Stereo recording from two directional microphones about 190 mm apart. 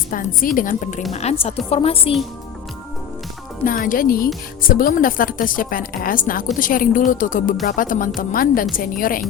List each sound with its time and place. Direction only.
0.1 s a woman's voice: 45° left (ahead or behind); by 2.1 s 30° left (ahead or behind)
3.6 s a woman's voice: 45° left (ahead or behind)